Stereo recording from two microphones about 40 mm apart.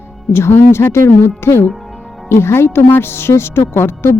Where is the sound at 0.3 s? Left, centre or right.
Left.